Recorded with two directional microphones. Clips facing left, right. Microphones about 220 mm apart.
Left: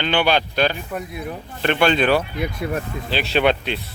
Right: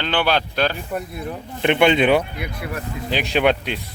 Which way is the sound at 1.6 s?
20° right (ahead or behind).